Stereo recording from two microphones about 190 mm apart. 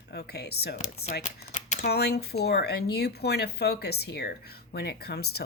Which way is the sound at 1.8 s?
60° left (ahead or behind).